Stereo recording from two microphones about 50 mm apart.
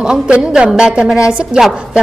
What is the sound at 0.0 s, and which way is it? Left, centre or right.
A woman's voice, centre.